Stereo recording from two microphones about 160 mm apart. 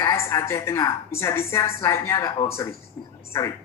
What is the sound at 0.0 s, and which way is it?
A woman's voice, 20° left (ahead or behind).